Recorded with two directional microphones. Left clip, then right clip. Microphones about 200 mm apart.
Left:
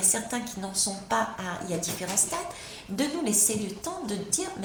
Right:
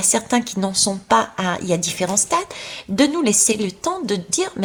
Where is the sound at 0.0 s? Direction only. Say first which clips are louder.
Right 10 dB; 35° right (ahead or behind).